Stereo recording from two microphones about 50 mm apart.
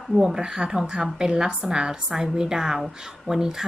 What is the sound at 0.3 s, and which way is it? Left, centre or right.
Speech, centre.